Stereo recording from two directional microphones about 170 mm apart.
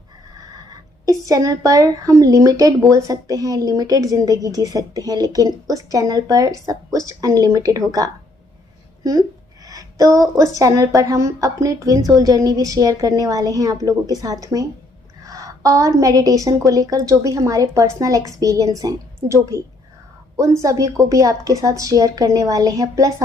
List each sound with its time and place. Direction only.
1.0 s speech: 20° right (ahead or behind)
9.6 s speech: 20° right (ahead or behind)